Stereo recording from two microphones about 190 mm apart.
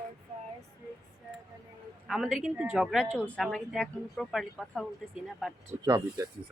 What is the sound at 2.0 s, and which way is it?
A woman's voice, centre (ahead or behind).